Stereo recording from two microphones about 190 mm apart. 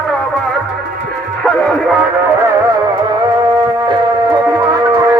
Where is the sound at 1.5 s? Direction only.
Centre (ahead or behind).